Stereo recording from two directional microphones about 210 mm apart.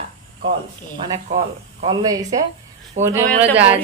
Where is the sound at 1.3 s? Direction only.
25° right (ahead or behind).